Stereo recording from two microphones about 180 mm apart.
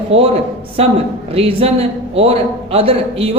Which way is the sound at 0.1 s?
30° right (ahead or behind).